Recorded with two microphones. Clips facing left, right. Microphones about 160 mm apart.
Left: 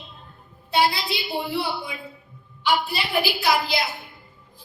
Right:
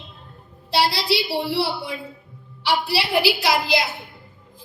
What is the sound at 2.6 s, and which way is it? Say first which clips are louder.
Speech: right 2 dB; 90° right.